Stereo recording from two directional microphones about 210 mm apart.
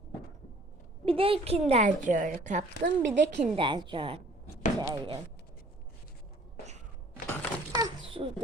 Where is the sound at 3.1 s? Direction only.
55° right (ahead or behind).